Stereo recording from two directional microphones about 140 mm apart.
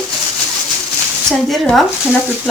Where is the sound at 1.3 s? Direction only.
Centre (ahead or behind).